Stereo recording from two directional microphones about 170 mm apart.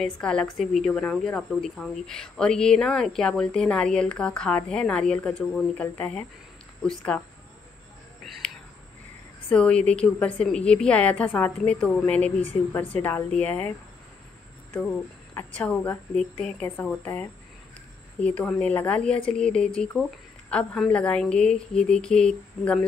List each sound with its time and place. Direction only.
0.0 s speech: 5° left (ahead or behind)
9.5 s a woman's voice: 5° left (ahead or behind)